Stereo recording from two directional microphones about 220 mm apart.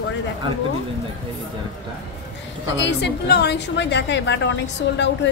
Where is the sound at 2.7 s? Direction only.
55° left (ahead or behind).